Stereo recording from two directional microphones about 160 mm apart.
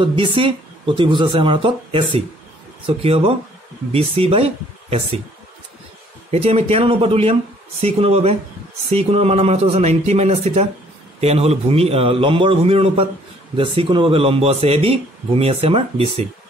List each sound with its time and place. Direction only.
0.0 s a man's voice: 30° right (ahead or behind)
6.3 s a man's voice: 40° right (ahead or behind)